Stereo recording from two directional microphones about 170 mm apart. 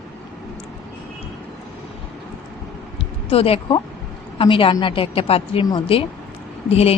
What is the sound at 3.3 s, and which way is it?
A woman's voice, 35° left (ahead or behind).